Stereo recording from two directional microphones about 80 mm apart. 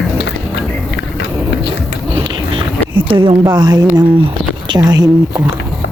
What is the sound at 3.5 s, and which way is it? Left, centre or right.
Speech, right.